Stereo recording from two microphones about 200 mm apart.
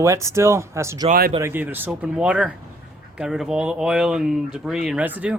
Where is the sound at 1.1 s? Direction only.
40° right (ahead or behind).